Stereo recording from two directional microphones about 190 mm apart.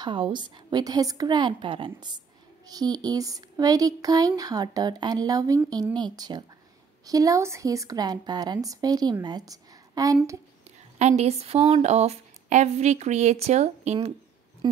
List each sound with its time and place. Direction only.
0.0 s a woman's voice: 25° right (ahead or behind)
11.0 s speech: 35° right (ahead or behind)
14.6 s a woman's voice: 25° right (ahead or behind)